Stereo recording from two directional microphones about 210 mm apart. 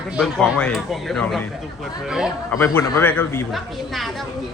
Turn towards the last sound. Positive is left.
turn(degrees=0)  # may be behind; listen again after turning